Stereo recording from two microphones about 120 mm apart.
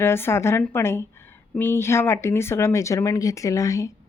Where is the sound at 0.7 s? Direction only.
20° left (ahead or behind).